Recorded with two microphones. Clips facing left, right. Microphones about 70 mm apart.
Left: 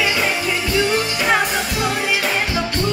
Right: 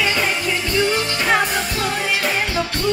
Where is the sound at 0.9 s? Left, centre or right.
Centre.